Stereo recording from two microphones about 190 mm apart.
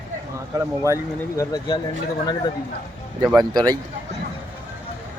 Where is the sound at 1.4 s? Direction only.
20° left (ahead or behind).